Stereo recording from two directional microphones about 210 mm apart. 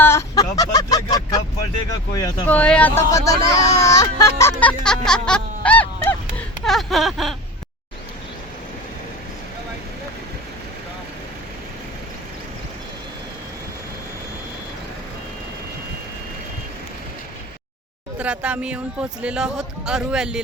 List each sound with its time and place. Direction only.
0.0 s a sound: 15° left (ahead or behind)
2.1 s speech: 15° left (ahead or behind)
2.5 s speech: 5° left (ahead or behind)
4.6 s honk: 5° left (ahead or behind)
6.7 s speech: centre (ahead or behind)
18.2 s speech: 5° right (ahead or behind)